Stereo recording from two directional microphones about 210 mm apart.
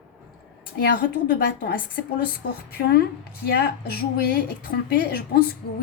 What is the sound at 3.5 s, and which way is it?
A woman's voice, 50° left (ahead or behind).